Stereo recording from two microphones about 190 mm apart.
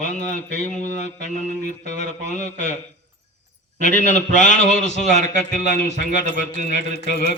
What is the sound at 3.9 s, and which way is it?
Speech, 40° left (ahead or behind).